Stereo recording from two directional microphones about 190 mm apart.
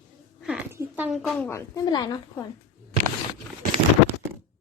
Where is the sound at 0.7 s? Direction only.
5° right (ahead or behind).